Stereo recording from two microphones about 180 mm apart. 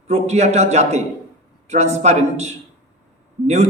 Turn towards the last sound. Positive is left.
turn(degrees=-40)  # may be behind; listen again after turning